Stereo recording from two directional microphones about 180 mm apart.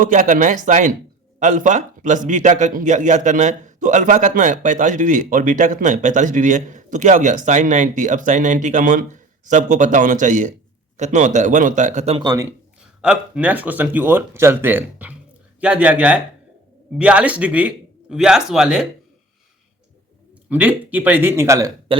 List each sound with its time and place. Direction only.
0.0 s a man's voice: 45° right (ahead or behind)
12.2 s a man's voice: 20° right (ahead or behind)
12.5 s speech: 5° right (ahead or behind)
20.5 s speech: 10° right (ahead or behind)